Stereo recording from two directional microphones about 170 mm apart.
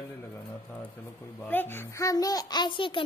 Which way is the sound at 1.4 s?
10° left (ahead or behind).